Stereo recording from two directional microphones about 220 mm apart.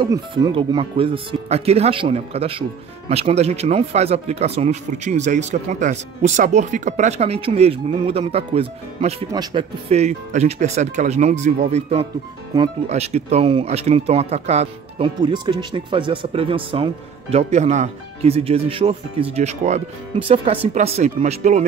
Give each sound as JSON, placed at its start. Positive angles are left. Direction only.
{"t": 0.0, "sound": "speech", "side_deg": -20}